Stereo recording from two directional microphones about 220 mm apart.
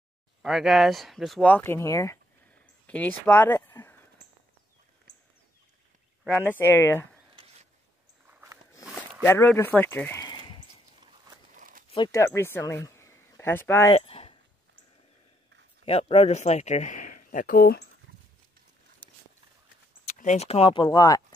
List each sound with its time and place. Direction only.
0.4 s speech: centre (ahead or behind)
6.2 s speech: 10° left (ahead or behind)
8.3 s a sound: 10° right (ahead or behind)
9.2 s speech: 10° left (ahead or behind)
11.9 s speech: 15° left (ahead or behind)
13.9 s a sound: 25° left (ahead or behind)
15.8 s speech: 25° left (ahead or behind)
20.1 s speech: 30° left (ahead or behind)